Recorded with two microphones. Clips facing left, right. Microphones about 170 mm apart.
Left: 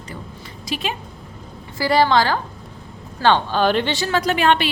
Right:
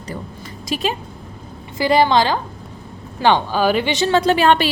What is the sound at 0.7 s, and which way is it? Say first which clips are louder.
Speech: right 4 dB; 40° right (ahead or behind).